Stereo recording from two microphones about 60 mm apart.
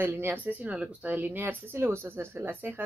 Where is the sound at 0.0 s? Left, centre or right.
Right.